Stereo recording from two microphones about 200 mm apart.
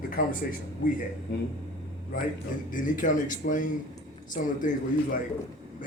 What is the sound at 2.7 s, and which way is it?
Speech, 40° left (ahead or behind).